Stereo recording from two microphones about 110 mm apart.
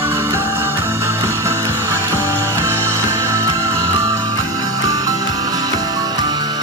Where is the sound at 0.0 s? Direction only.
20° right (ahead or behind).